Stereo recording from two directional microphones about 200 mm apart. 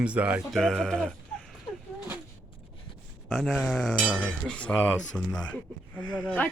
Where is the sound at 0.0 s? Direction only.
5° right (ahead or behind).